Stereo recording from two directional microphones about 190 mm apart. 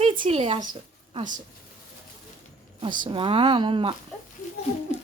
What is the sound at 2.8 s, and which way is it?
Speech, 25° right (ahead or behind).